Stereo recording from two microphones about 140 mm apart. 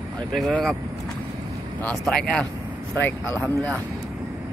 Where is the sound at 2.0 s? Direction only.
5° left (ahead or behind).